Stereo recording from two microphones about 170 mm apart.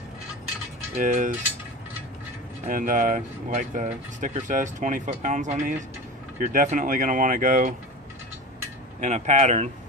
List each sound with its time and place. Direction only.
0.9 s speech: 45° right (ahead or behind)
2.6 s speech: 50° right (ahead or behind)
9.0 s speech: 45° right (ahead or behind)